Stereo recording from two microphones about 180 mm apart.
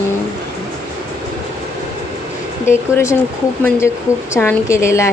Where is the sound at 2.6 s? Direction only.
15° left (ahead or behind).